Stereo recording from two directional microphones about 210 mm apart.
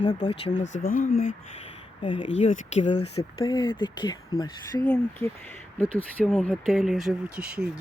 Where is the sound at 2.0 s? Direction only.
30° left (ahead or behind).